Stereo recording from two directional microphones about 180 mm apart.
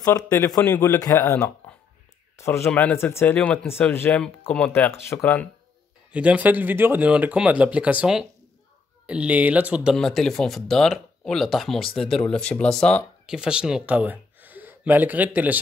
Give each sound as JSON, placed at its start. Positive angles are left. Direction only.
{"t": 0.0, "sound": "speech", "side_deg": 15}
{"t": 6.1, "sound": "speech", "side_deg": -10}